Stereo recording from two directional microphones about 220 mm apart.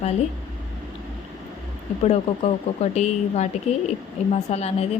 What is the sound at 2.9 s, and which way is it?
A woman's voice, 30° left (ahead or behind).